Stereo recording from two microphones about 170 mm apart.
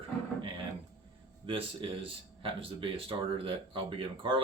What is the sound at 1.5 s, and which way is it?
Speech, 30° right (ahead or behind).